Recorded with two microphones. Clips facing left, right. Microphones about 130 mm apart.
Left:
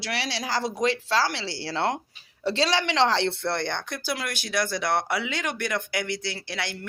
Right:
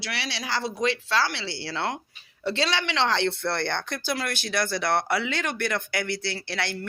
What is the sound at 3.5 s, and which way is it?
Speech, 15° left (ahead or behind).